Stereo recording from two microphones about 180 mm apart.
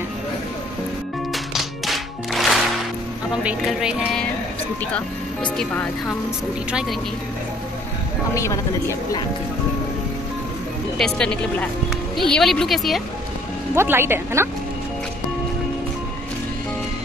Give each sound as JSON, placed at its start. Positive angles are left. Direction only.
{"t": 1.3, "sound": "music", "side_deg": 0}
{"t": 4.9, "sound": "speech", "side_deg": 5}
{"t": 8.4, "sound": "speech", "side_deg": 15}
{"t": 11.0, "sound": "music", "side_deg": 5}
{"t": 13.7, "sound": "speech", "side_deg": -15}